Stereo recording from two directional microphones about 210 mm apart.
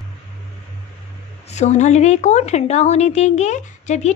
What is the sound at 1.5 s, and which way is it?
A woman's voice, 35° left (ahead or behind).